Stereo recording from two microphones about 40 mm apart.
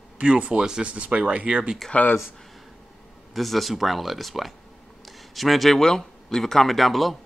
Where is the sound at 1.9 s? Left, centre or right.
Left.